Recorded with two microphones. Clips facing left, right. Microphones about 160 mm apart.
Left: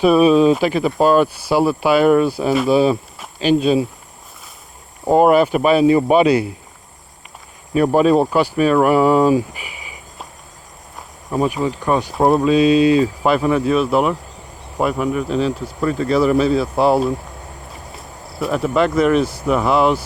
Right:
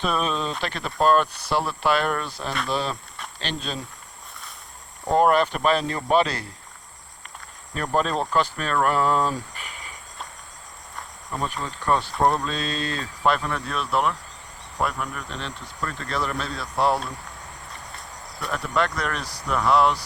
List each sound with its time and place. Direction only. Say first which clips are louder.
0.0 s speech: left 14 dB; 10° left (ahead or behind)
5.1 s speech: left 7 dB; 5° left (ahead or behind)
7.9 s speech: left 8 dB; 10° left (ahead or behind)
18.3 s speech: left 8 dB; 5° left (ahead or behind)